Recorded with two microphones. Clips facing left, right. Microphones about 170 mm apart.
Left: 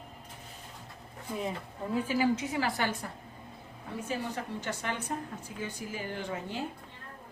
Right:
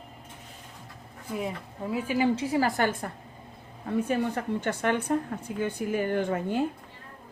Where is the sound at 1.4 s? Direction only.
5° right (ahead or behind).